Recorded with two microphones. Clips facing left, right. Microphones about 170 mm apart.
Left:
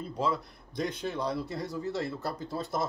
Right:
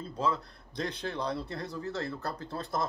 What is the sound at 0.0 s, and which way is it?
A man's voice, 10° left (ahead or behind).